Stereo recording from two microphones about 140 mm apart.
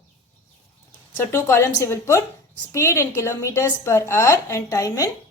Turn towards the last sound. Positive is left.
turn(degrees=25)  # may be behind; listen again after turning